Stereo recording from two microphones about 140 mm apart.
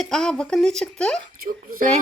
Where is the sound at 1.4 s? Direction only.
75° right (ahead or behind).